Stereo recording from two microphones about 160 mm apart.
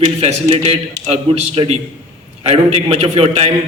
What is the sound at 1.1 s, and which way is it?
A man's voice, 40° right (ahead or behind).